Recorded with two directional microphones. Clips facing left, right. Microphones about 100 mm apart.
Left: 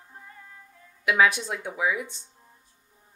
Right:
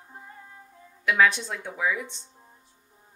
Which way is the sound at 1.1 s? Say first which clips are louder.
Even; 10° left (ahead or behind).